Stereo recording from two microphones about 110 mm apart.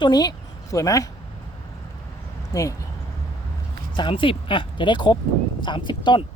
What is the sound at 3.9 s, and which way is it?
Speech, 50° left (ahead or behind).